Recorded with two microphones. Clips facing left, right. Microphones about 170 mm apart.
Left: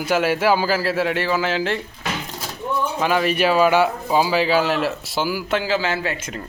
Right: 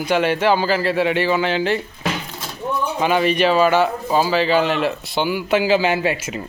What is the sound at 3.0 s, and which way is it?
Speech, centre (ahead or behind).